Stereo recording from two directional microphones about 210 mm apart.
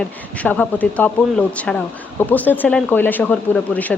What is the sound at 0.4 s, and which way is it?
Speech, 5° left (ahead or behind).